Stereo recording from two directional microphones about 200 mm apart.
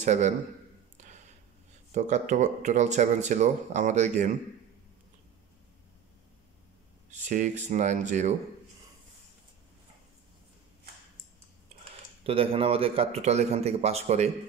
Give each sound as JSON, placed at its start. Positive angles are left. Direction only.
{"t": 0.0, "sound": "a man's voice", "side_deg": -35}
{"t": 1.0, "sound": "a sound", "side_deg": -35}
{"t": 2.0, "sound": "speech", "side_deg": -35}
{"t": 7.1, "sound": "speech", "side_deg": -35}
{"t": 12.2, "sound": "speech", "side_deg": -30}